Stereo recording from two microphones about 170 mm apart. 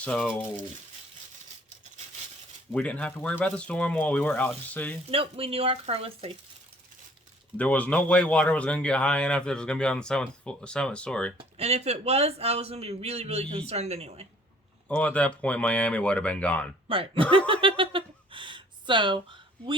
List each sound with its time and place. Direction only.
0.0 s speech: 5° left (ahead or behind)
2.7 s speech: 5° left (ahead or behind)
5.1 s a man's voice: 35° right (ahead or behind)
7.5 s a man's voice: 10° left (ahead or behind)
11.3 s a man's voice: 35° right (ahead or behind)
14.8 s speech: 10° left (ahead or behind)
16.9 s a man's voice: 30° right (ahead or behind)
17.3 s a sound: 30° right (ahead or behind)